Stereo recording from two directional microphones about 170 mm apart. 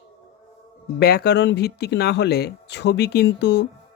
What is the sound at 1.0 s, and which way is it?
Speech, 65° left (ahead or behind).